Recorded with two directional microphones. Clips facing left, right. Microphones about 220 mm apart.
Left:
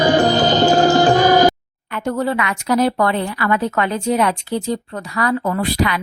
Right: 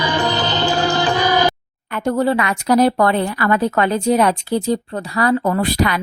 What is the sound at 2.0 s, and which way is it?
A woman's voice, 35° right (ahead or behind).